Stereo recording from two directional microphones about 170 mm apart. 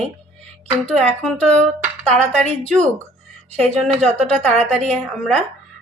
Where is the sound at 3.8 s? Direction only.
Centre (ahead or behind).